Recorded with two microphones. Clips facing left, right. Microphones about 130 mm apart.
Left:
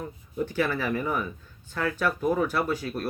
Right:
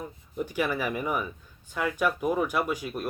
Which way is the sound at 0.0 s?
10° right (ahead or behind).